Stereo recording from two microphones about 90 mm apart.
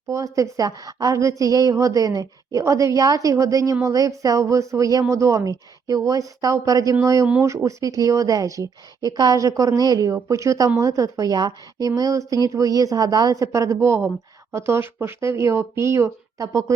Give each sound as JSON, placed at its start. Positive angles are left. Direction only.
{"t": 0.1, "sound": "a woman's voice", "side_deg": -35}